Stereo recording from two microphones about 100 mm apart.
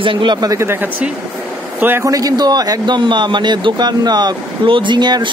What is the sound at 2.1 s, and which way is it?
A man's voice, 40° right (ahead or behind).